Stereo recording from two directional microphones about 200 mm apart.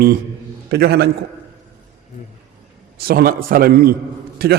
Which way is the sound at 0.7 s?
50° right (ahead or behind).